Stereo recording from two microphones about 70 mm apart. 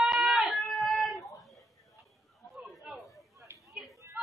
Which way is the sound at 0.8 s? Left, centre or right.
Centre.